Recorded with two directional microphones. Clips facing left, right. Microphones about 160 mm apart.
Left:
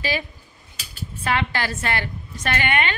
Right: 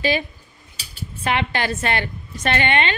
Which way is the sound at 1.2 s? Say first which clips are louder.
Right 2 dB; 20° right (ahead or behind).